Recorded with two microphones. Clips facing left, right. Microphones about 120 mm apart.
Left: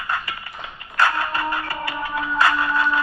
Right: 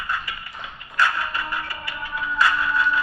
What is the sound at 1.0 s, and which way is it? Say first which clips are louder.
Music: left 3 dB; 55° left (ahead or behind).